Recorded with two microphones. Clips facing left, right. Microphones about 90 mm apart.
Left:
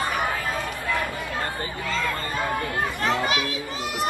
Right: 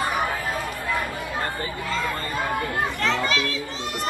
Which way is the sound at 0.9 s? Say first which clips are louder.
Even; 5° right (ahead or behind).